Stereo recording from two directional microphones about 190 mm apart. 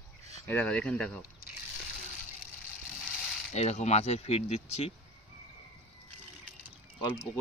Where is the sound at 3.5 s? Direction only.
35° left (ahead or behind).